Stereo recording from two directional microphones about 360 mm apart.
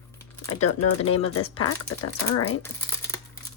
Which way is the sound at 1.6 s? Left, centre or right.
Left.